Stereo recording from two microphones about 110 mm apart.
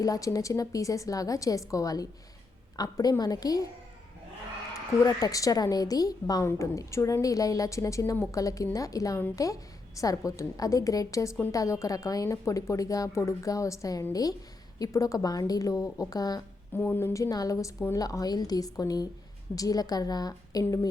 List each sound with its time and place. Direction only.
0.0 s a woman's voice: 30° left (ahead or behind)
5.0 s a woman's voice: 30° left (ahead or behind)
16.7 s a woman's voice: 15° left (ahead or behind); by 20.9 s 35° left (ahead or behind)